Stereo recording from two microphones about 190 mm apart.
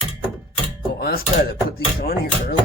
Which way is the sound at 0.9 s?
55° left (ahead or behind).